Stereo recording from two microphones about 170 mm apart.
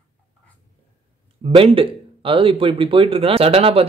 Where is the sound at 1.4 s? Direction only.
35° right (ahead or behind).